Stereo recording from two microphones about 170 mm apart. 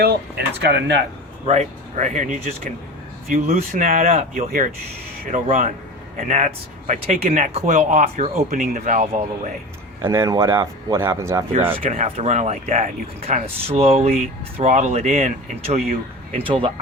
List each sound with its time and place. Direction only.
0.0 s speech: 70° right (ahead or behind); by 1.0 s 90° right
1.5 s speech: 45° right (ahead or behind)
8.4 s speech: 50° right (ahead or behind)
10.0 s speech: 15° right (ahead or behind)
11.7 s speech: 40° right (ahead or behind)